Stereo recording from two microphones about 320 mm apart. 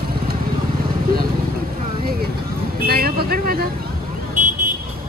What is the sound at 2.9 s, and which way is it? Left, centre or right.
Vehicle, right.